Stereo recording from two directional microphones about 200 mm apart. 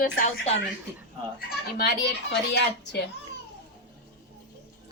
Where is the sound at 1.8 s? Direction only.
60° left (ahead or behind).